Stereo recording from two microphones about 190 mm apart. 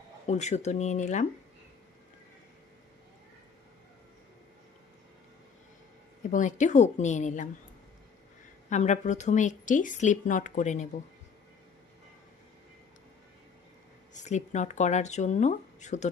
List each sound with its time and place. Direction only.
0.3 s a woman's voice: 35° left (ahead or behind)
6.3 s a woman's voice: 40° left (ahead or behind)
8.7 s a woman's voice: 40° left (ahead or behind)
14.1 s a woman's voice: 40° left (ahead or behind)